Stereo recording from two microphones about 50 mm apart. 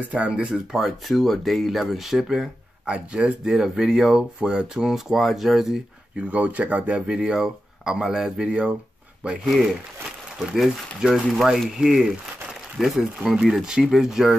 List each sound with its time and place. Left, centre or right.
0.1 s speech: right
0.5 s speech: centre
2.9 s speech: right; by 5.8 s centre
6.1 s speech: right
9.4 s speech: centre